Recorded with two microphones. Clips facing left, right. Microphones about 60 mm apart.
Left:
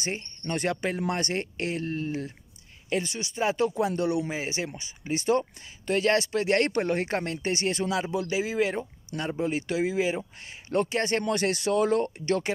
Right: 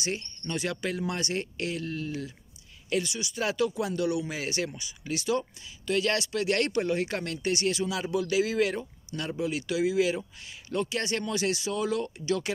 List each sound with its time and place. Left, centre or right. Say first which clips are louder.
0.0 s speech: even; left
0.5 s speech: left 3 dB; left
10.7 s speech: left 4 dB; left